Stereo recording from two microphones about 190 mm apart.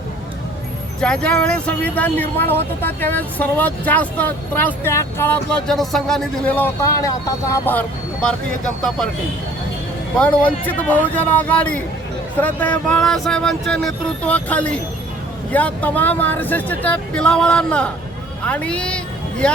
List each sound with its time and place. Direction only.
1.0 s speech: 5° left (ahead or behind)
10.2 s a woman's voice: 5° left (ahead or behind)